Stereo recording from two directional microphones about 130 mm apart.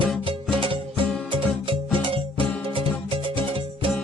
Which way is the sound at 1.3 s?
40° right (ahead or behind).